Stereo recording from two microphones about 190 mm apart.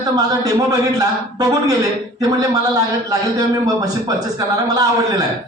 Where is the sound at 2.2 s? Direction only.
20° right (ahead or behind).